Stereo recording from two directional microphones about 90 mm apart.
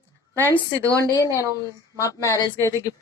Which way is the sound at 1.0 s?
45° left (ahead or behind).